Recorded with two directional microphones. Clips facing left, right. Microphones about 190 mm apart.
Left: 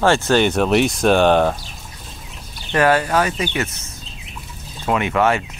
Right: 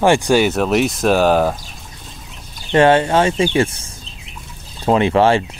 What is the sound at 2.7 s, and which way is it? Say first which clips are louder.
Speech: right 4 dB; 25° right (ahead or behind).